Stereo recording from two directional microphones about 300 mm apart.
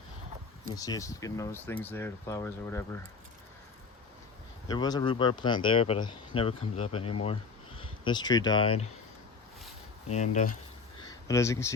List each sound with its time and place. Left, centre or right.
0.8 s speech: centre
4.7 s speech: centre
10.1 s speech: left
11.0 s a sound: centre